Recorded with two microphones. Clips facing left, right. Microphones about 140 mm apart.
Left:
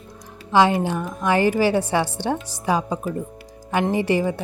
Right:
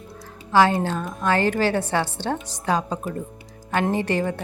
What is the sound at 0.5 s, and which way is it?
Speech, 15° left (ahead or behind).